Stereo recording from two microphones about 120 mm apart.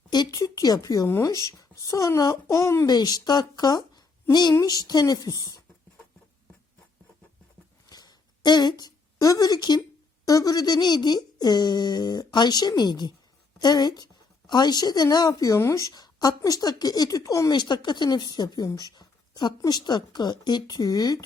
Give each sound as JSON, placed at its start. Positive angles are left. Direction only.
{"t": 0.1, "sound": "a woman's voice", "side_deg": 30}
{"t": 7.9, "sound": "a sound", "side_deg": 35}
{"t": 10.2, "sound": "a woman's voice", "side_deg": 30}